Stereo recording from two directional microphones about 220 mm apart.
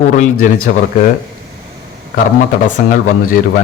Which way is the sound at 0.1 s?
35° left (ahead or behind).